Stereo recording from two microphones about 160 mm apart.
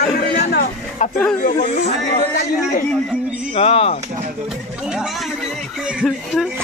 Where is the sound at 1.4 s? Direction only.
45° left (ahead or behind).